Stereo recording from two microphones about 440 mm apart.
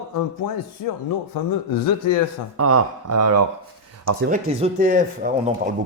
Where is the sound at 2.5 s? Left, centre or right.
Right.